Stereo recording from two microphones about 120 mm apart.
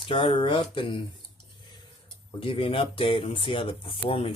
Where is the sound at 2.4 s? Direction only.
50° left (ahead or behind).